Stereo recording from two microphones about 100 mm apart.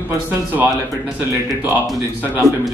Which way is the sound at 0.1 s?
20° right (ahead or behind).